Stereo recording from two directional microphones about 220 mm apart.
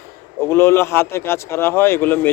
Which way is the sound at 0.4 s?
10° left (ahead or behind).